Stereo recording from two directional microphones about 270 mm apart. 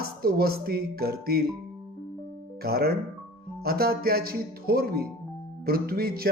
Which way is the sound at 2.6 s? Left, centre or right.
Right.